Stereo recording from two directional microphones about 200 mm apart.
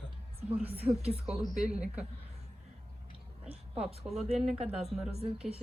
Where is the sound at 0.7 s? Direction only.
30° right (ahead or behind).